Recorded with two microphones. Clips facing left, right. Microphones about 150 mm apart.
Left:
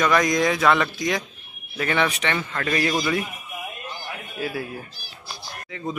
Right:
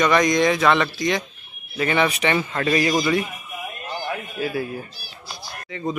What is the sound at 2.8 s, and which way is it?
Speech, 5° right (ahead or behind).